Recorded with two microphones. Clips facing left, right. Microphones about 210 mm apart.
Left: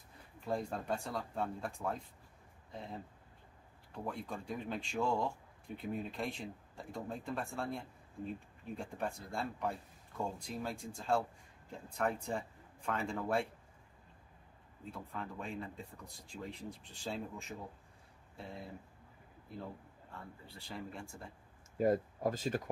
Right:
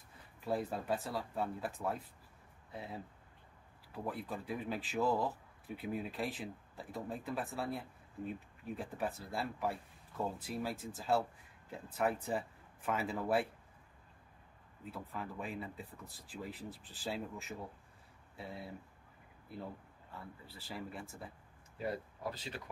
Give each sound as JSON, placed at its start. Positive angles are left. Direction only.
{"t": 0.4, "sound": "speech", "side_deg": -5}
{"t": 14.9, "sound": "speech", "side_deg": -5}
{"t": 20.4, "sound": "speech", "side_deg": -5}
{"t": 21.7, "sound": "speech", "side_deg": 45}